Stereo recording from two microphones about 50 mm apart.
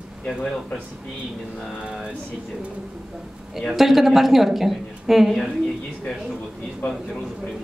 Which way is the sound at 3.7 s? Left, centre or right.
Centre.